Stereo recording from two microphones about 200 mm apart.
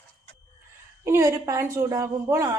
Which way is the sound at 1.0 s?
15° right (ahead or behind).